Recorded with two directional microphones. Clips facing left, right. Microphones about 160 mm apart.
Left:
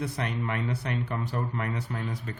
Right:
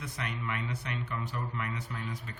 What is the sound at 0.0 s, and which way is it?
Speech, 35° left (ahead or behind).